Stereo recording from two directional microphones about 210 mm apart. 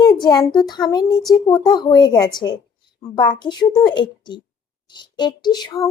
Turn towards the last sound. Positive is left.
turn(degrees=20)  # may be behind; listen again after turning